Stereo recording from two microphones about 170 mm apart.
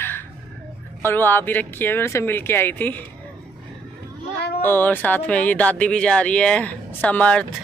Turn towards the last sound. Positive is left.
turn(degrees=5)  # may be behind; listen again after turning